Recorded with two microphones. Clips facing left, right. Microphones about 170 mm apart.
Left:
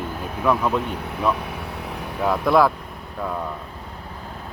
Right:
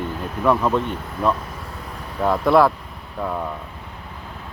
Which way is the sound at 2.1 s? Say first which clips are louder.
Right 2 dB; centre (ahead or behind).